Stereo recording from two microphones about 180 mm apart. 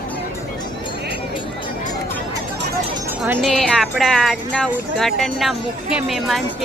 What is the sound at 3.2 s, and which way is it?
Speech, centre (ahead or behind).